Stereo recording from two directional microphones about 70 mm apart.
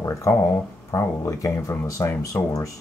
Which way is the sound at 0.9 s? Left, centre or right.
Left.